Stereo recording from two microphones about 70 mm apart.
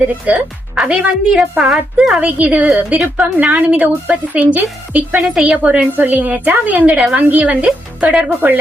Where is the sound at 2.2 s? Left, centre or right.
Centre.